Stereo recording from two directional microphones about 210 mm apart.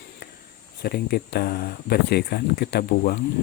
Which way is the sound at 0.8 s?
50° left (ahead or behind).